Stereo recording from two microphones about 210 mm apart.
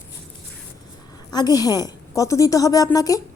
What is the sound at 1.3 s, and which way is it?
A woman's voice, 20° left (ahead or behind).